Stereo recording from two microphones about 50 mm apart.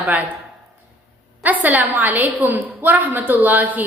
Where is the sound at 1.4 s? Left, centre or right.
Right.